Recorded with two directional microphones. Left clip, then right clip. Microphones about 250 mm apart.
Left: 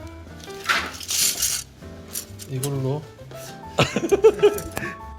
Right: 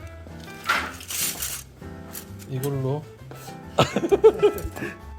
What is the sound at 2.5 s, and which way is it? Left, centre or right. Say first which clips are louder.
Speech: even; centre.